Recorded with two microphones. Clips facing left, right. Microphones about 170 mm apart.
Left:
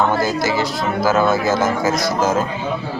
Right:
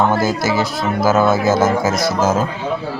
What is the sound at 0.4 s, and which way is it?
Speech, 15° left (ahead or behind).